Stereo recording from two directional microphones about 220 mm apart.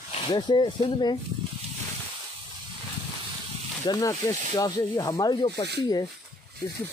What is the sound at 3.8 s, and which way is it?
Speech, 15° left (ahead or behind).